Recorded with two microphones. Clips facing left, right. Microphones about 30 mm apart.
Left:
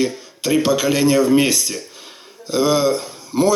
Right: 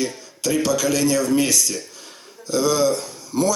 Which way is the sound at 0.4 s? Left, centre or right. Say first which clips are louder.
Left 3 dB; left.